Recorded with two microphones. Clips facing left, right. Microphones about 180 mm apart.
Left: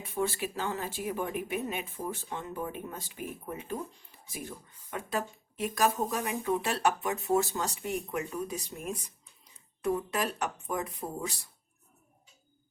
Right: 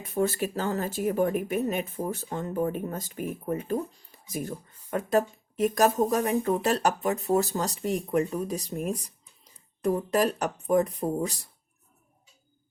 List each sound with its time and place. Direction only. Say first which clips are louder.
0.0 s speech: right 5 dB; 45° right (ahead or behind)